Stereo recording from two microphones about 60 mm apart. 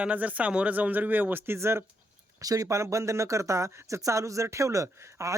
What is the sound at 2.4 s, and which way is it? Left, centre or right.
Speech, right.